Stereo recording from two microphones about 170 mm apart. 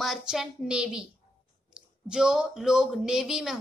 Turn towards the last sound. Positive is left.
turn(degrees=0)  # may be behind; listen again after turning